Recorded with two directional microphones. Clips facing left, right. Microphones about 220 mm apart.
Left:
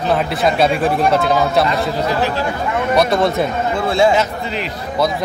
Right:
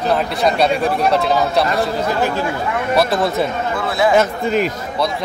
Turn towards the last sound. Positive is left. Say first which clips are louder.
# right 4 dB
turn(degrees=-50)  # may be behind; listen again after turning